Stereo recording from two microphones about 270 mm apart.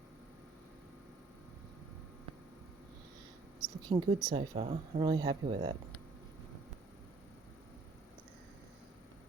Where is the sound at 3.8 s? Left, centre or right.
Centre.